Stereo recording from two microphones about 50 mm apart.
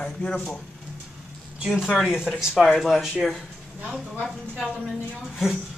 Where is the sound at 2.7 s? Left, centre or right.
Centre.